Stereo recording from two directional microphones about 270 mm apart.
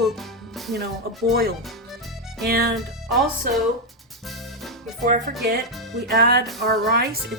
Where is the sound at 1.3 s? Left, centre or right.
Right.